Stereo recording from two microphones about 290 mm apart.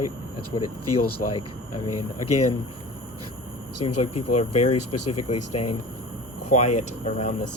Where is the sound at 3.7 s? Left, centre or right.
Left.